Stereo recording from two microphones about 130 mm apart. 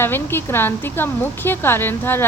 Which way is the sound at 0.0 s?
15° left (ahead or behind).